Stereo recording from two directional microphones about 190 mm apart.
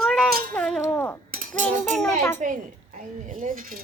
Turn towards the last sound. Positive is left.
turn(degrees=-50)  # may be behind; listen again after turning